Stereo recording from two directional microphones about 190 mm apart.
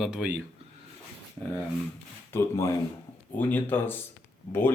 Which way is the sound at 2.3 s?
15° left (ahead or behind).